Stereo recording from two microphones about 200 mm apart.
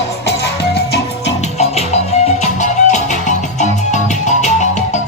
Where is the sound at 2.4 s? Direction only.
35° left (ahead or behind).